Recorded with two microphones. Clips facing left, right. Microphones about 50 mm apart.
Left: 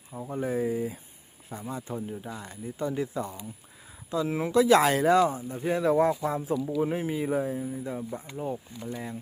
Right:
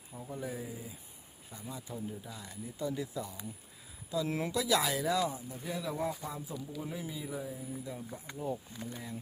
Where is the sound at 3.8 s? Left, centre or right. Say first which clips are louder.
Left 5 dB; left.